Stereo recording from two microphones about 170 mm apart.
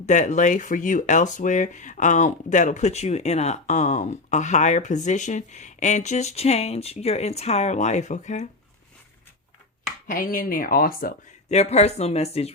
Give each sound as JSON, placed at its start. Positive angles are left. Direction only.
{"t": 0.0, "sound": "speech", "side_deg": 45}
{"t": 10.1, "sound": "speech", "side_deg": 55}
{"t": 11.4, "sound": "speech", "side_deg": 40}